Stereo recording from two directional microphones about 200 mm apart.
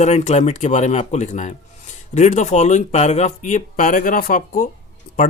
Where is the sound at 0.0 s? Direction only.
35° left (ahead or behind).